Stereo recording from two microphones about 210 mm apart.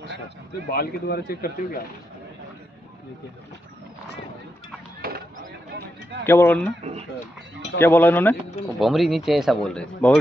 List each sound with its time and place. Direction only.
0.7 s speech: 50° left (ahead or behind)
6.2 s speech: 10° left (ahead or behind)
7.8 s speech: 10° left (ahead or behind)